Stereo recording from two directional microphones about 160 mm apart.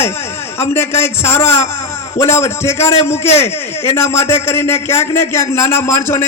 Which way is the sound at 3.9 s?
15° left (ahead or behind).